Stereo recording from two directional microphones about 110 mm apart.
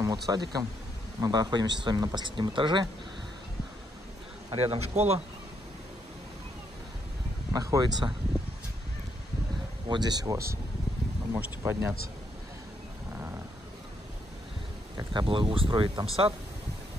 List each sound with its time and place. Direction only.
0.0 s speech: 35° right (ahead or behind)
4.6 s speech: 70° right (ahead or behind)
7.5 s speech: 35° right (ahead or behind)
9.8 s speech: 40° right (ahead or behind); by 11.9 s 20° right (ahead or behind)
15.0 s speech: 50° right (ahead or behind)